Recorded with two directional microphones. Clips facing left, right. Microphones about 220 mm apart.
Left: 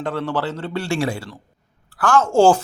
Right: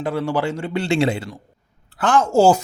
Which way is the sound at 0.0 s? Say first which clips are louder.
Right 2 dB; 10° right (ahead or behind).